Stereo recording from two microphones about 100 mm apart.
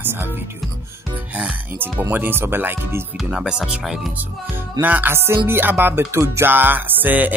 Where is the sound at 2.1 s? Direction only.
20° right (ahead or behind).